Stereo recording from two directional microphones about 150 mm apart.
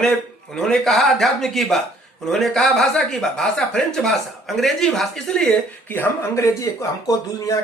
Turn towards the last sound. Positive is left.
turn(degrees=25)  # may be behind; listen again after turning